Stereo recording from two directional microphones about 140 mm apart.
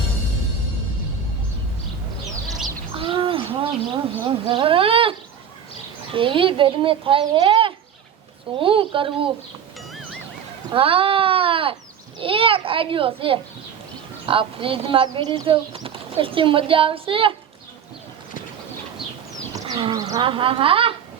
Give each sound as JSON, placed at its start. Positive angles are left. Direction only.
{"t": 2.9, "sound": "owl", "side_deg": -40}
{"t": 4.3, "sound": "speech", "side_deg": -40}
{"t": 6.1, "sound": "speech", "side_deg": -40}
{"t": 10.7, "sound": "speech", "side_deg": -40}
{"t": 19.5, "sound": "a sound", "side_deg": -30}
{"t": 20.2, "sound": "speech", "side_deg": -40}